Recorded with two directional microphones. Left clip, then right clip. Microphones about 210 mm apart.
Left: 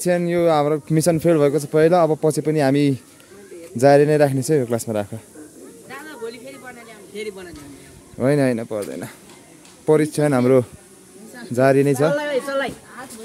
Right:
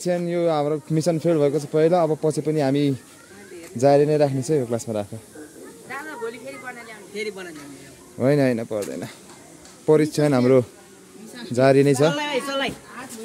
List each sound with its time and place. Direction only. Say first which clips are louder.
0.0 s a man's voice: left 4 dB; 20° left (ahead or behind)
5.9 s snake: right 2 dB; 15° left (ahead or behind)
8.2 s speech: left 1 dB; 5° left (ahead or behind)
9.8 s a man's voice: left 1 dB; 5° left (ahead or behind)
12.1 s speech: left 3 dB; 40° right (ahead or behind)